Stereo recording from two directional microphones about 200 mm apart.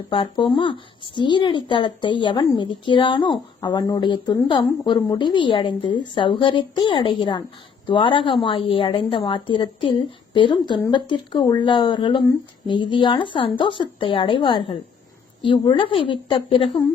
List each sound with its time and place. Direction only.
0.1 s a woman's voice: 25° left (ahead or behind)